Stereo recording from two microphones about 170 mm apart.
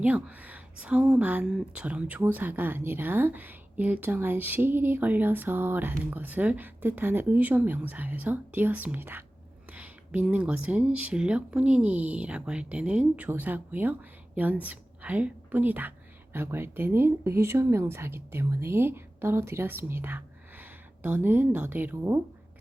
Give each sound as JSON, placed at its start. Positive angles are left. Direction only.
{"t": 0.0, "sound": "a woman's voice", "side_deg": -10}